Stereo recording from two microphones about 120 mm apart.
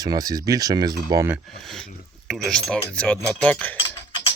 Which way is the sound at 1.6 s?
5° left (ahead or behind).